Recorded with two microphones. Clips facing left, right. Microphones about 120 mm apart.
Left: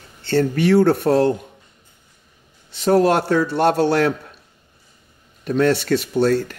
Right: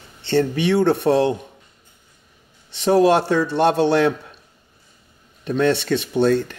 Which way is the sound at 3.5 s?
20° right (ahead or behind).